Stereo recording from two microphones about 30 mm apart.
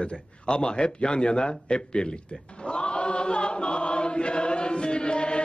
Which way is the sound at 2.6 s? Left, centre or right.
Left.